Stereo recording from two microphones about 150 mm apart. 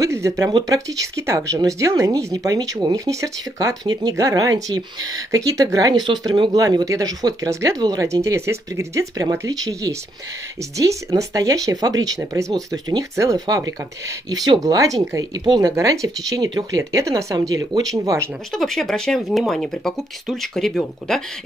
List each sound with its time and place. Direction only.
0.0 s speech: 20° right (ahead or behind)
18.5 s speech: centre (ahead or behind)